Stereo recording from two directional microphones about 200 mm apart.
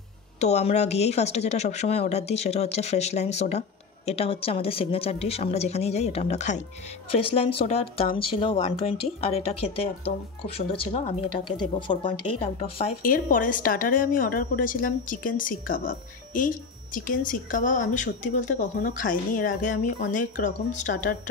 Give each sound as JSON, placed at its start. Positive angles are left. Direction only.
{"t": 0.4, "sound": "speech", "side_deg": 35}
{"t": 13.0, "sound": "a woman's voice", "side_deg": 45}